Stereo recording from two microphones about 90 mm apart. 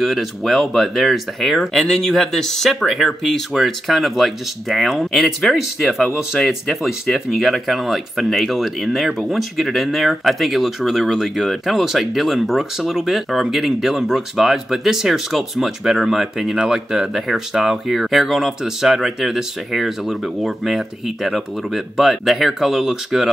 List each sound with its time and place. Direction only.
0.0 s speech: centre (ahead or behind)